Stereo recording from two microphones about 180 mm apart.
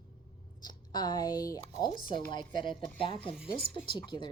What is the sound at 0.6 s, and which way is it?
A woman's voice, 25° left (ahead or behind).